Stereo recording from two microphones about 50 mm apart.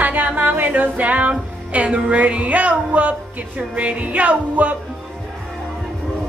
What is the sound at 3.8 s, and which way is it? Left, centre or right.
Speech, right.